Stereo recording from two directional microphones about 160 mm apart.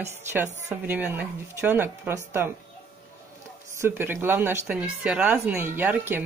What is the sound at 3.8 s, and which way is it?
Speech, 15° right (ahead or behind).